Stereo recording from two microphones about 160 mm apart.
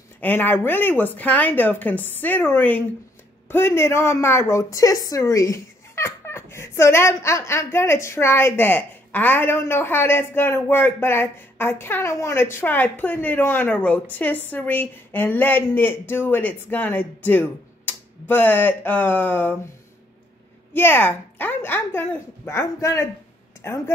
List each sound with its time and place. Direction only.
0.2 s a woman's voice: 10° left (ahead or behind)
20.7 s a woman's voice: 15° left (ahead or behind)